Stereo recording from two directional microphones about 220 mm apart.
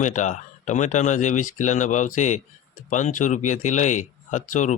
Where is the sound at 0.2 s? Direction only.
35° left (ahead or behind).